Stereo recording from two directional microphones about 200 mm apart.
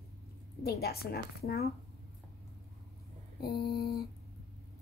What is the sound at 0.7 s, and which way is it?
A woman's voice, 50° left (ahead or behind).